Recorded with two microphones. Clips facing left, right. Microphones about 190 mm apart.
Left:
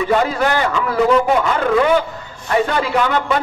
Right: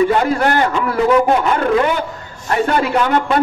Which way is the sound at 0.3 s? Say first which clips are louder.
Right 2 dB; 55° right (ahead or behind).